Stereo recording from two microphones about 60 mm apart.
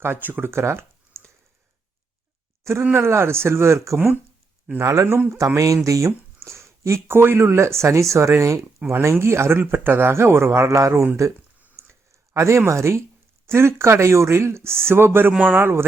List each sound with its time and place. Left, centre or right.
0.0 s speech: right
3.0 s speech: right
3.9 s speech: right
4.8 s speech: right
5.5 s speech: right
10.7 s speech: right
11.8 s a sound: right
13.5 s speech: right